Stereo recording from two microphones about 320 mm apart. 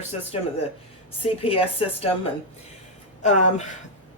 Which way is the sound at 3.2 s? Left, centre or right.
Left.